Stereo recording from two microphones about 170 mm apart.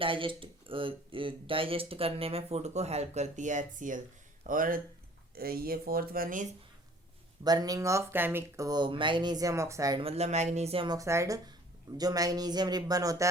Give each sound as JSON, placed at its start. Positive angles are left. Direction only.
{"t": 0.0, "sound": "speech", "side_deg": -30}
{"t": 7.4, "sound": "speech", "side_deg": -25}
{"t": 10.0, "sound": "speech", "side_deg": -40}
{"t": 10.8, "sound": "speech", "side_deg": -20}